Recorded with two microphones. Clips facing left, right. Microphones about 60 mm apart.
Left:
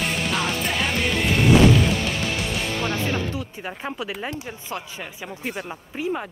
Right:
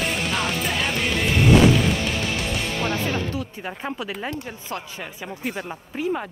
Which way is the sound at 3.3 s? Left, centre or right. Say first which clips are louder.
Right 2 dB; left.